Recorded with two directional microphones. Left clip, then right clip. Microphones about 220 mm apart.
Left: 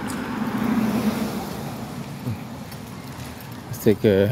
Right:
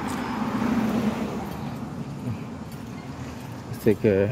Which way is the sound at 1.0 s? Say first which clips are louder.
Left 2 dB; 50° left (ahead or behind).